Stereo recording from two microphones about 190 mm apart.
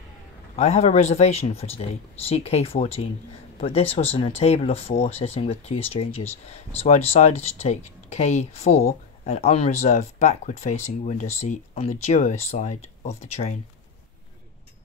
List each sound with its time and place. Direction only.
0.6 s speech: 35° left (ahead or behind)